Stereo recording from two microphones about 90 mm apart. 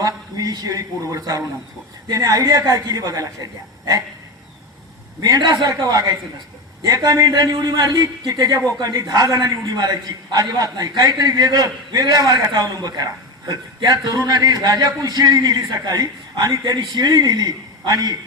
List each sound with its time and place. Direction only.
0.0 s a man's voice: 45° right (ahead or behind)
5.2 s a man's voice: 50° right (ahead or behind)
5.8 s a man's voice: 40° right (ahead or behind)